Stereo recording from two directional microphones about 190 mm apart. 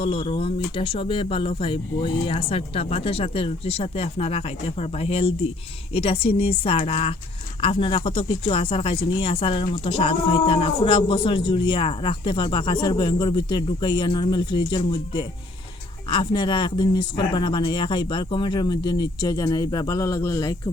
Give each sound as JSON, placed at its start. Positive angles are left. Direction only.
{"t": 0.0, "sound": "speech", "side_deg": 30}